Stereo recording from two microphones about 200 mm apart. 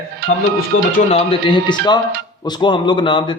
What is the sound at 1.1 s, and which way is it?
A man's voice, 25° left (ahead or behind).